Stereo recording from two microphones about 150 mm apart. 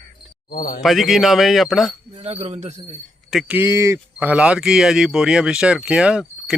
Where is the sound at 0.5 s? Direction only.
85° left.